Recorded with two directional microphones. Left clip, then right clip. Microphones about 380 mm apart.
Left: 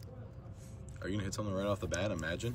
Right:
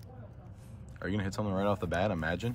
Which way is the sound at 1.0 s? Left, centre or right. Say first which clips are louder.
Right 4 dB; centre.